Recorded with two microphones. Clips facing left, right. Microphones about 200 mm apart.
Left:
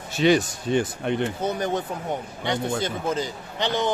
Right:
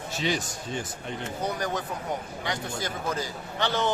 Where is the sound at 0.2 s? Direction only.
65° left (ahead or behind).